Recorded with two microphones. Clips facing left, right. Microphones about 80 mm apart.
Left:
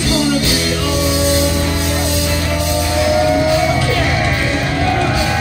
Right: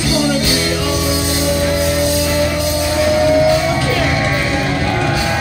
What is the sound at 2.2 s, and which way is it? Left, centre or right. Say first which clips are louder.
Music: right 3 dB; centre.